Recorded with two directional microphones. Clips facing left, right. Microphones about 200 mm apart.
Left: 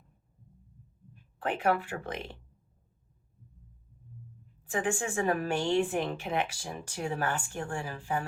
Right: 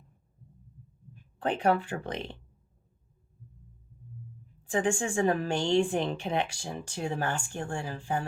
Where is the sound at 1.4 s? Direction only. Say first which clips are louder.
Right 2 dB; 30° right (ahead or behind).